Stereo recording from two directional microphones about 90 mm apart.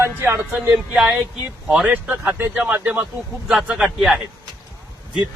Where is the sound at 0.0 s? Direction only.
25° right (ahead or behind).